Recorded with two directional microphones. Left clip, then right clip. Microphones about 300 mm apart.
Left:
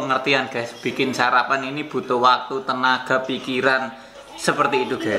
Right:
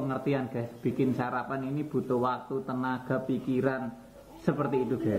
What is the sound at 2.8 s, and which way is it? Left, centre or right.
A woman's voice, centre.